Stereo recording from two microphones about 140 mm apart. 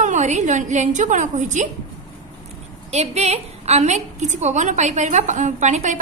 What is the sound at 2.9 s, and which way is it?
A woman's voice, 50° right (ahead or behind).